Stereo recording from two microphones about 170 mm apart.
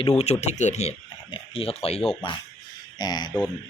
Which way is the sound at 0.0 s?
40° left (ahead or behind).